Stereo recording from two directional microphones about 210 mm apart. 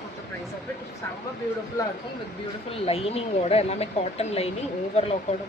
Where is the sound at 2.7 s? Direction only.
30° left (ahead or behind).